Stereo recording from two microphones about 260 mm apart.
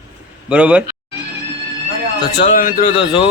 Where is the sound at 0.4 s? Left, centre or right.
Centre.